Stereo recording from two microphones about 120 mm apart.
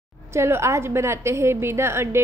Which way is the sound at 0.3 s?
20° right (ahead or behind).